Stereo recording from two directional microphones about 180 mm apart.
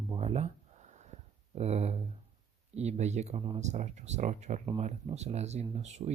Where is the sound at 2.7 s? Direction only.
40° right (ahead or behind).